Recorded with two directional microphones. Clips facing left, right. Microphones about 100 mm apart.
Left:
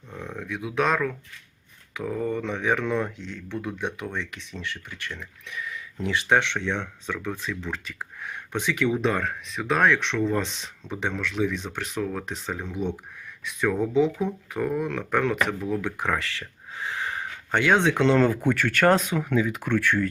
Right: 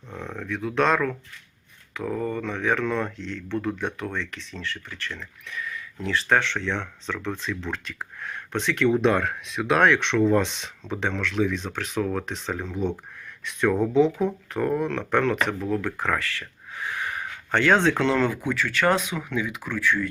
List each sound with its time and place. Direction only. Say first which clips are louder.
0.2 s speech: right 2 dB; 10° left (ahead or behind); by 18.3 s 35° left (ahead or behind)
18.4 s speech: left 2 dB; 55° left (ahead or behind)
19.7 s speech: left 1 dB; 60° left (ahead or behind)